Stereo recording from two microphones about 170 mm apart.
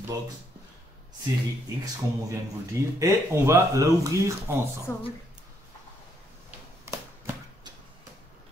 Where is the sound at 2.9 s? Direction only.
15° right (ahead or behind).